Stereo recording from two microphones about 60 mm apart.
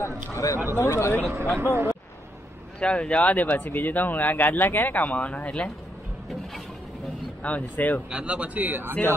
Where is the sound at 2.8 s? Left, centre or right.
Centre.